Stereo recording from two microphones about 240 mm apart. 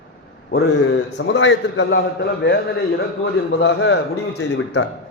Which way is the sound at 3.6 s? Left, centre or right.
Left.